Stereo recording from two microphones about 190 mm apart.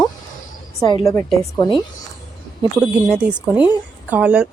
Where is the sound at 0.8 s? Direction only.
20° left (ahead or behind).